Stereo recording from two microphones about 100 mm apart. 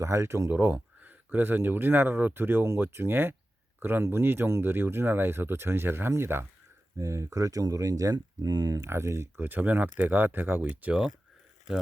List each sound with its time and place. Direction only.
0.0 s speech: 30° right (ahead or behind); by 11.1 s 10° right (ahead or behind)